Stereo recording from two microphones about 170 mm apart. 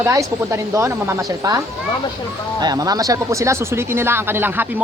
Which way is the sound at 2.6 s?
20° right (ahead or behind).